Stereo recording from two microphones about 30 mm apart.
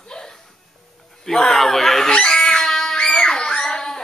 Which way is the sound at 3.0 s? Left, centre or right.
Left.